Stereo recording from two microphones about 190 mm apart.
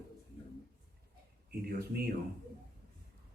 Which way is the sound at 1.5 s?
55° right (ahead or behind).